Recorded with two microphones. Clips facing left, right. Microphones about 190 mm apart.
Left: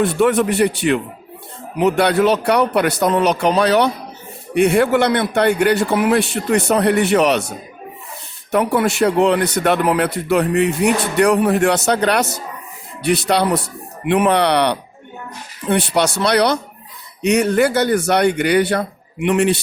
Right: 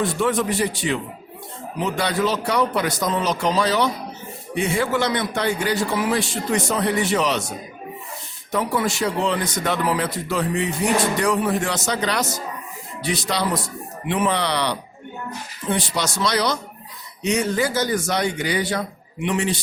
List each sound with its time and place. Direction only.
0.0 s speech: 65° left (ahead or behind)
8.5 s speech: 60° left (ahead or behind)